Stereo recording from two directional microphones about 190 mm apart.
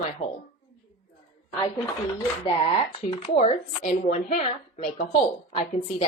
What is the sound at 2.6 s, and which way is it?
Speech, 30° left (ahead or behind).